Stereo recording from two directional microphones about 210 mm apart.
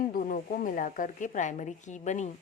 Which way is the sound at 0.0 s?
45° left (ahead or behind).